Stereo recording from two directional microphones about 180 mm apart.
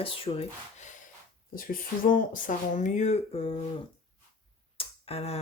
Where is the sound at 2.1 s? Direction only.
50° left (ahead or behind).